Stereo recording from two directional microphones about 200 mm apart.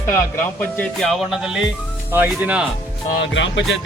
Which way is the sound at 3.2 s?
65° left (ahead or behind).